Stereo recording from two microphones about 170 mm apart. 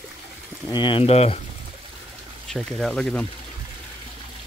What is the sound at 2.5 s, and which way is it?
Speech, centre (ahead or behind).